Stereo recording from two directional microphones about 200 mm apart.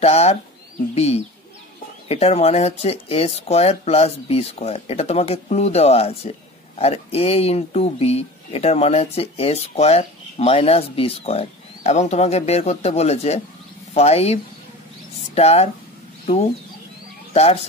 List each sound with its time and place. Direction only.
0.0 s speech: 30° left (ahead or behind)
17.3 s speech: 30° left (ahead or behind)